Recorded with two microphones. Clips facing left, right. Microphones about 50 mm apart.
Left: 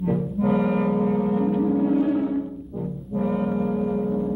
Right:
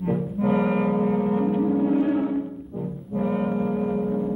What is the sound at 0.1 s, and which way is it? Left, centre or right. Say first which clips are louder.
Music: even; centre.